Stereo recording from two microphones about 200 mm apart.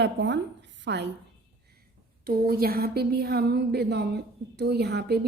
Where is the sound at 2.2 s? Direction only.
50° right (ahead or behind).